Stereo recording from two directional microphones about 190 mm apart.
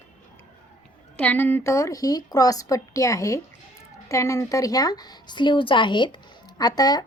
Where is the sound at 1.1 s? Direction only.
10° left (ahead or behind).